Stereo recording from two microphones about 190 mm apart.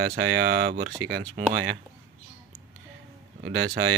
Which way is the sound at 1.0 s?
90° right.